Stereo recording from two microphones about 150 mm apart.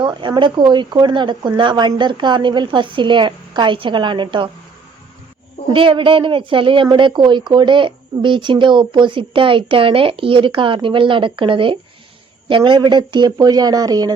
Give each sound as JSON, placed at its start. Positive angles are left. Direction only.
{"t": 0.0, "sound": "speech", "side_deg": -30}
{"t": 5.7, "sound": "speech", "side_deg": -35}